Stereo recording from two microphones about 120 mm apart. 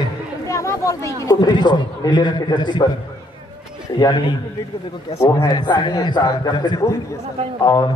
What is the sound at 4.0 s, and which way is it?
Speech, 40° left (ahead or behind).